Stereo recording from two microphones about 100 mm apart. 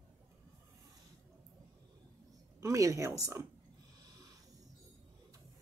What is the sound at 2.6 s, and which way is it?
Speech, 35° right (ahead or behind).